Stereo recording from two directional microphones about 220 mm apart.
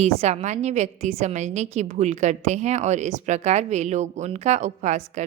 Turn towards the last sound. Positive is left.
turn(degrees=-30)  # may be behind; listen again after turning